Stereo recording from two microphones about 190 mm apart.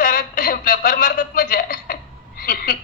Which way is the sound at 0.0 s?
50° left (ahead or behind).